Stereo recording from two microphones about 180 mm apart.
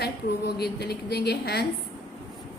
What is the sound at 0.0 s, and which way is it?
A woman's voice, 65° left (ahead or behind).